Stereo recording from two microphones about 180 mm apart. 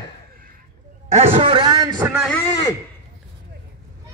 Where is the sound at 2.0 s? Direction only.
10° right (ahead or behind).